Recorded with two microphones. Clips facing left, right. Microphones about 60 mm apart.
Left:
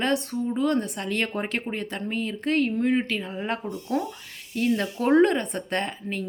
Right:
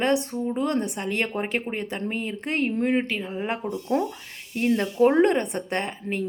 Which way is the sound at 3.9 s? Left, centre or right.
Right.